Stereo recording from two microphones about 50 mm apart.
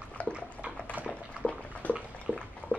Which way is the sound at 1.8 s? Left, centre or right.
Left.